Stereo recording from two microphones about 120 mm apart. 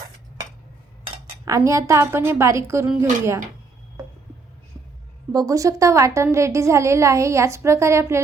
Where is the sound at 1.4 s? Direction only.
25° right (ahead or behind).